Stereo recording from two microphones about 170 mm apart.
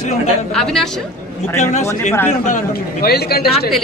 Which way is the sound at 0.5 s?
Centre (ahead or behind).